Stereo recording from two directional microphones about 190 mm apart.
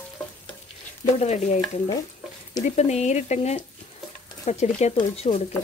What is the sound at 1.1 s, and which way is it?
Speech, 35° left (ahead or behind).